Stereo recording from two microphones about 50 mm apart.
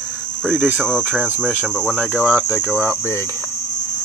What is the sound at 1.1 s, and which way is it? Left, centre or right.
Cricket, right.